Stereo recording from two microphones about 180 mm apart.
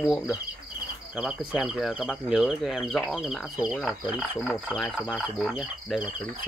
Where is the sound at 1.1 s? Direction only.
5° right (ahead or behind).